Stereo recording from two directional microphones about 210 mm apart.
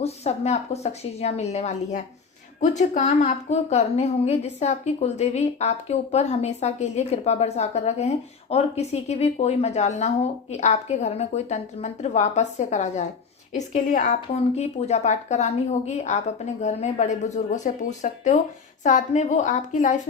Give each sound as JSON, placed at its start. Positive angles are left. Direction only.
{"t": 0.0, "sound": "a woman's voice", "side_deg": 30}